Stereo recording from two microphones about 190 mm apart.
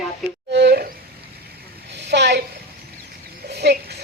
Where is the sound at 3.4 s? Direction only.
60° right (ahead or behind).